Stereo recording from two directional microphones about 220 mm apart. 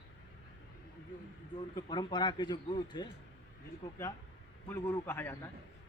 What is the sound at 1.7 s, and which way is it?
Speech, 20° left (ahead or behind).